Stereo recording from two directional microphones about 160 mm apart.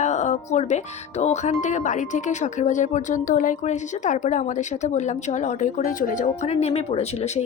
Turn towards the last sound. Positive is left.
turn(degrees=40)  # may be behind; listen again after turning